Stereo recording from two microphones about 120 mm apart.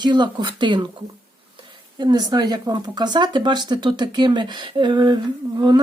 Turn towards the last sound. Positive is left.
turn(degrees=-40)  # may be behind; listen again after turning